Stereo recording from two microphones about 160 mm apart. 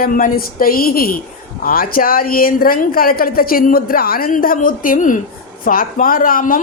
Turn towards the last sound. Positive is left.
turn(degrees=60)  # may be behind; listen again after turning